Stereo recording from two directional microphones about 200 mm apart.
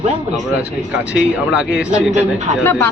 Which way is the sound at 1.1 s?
5° right (ahead or behind).